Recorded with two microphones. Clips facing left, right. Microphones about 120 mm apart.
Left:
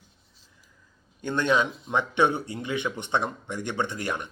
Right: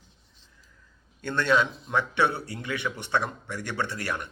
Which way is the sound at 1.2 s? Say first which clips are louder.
Even; 15° left (ahead or behind).